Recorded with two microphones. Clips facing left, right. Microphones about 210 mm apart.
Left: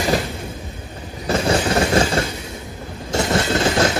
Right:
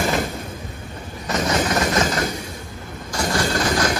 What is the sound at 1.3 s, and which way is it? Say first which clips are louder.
Train: left 3 dB; 30° left (ahead or behind).